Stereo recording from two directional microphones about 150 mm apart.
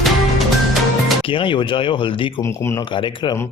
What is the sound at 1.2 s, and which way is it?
Speech, 35° left (ahead or behind).